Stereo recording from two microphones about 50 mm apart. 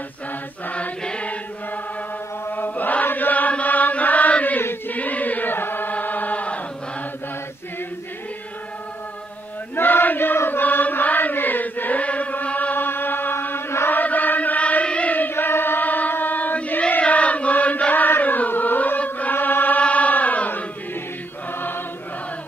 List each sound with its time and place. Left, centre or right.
0.7 s chant: left
2.4 s chant: left
4.6 s chant: left
9.8 s chant: left
12.7 s chant: left
13.8 s chant: left
18.2 s music: left
19.3 s chant: left
21.5 s choir: left